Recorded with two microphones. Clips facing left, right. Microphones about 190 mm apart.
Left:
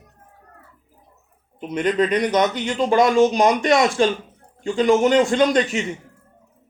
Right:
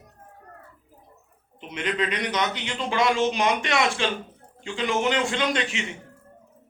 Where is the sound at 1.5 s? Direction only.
45° left (ahead or behind).